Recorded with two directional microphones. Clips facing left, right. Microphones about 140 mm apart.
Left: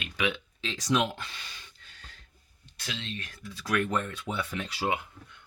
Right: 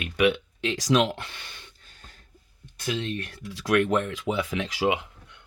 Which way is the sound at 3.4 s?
75° right (ahead or behind).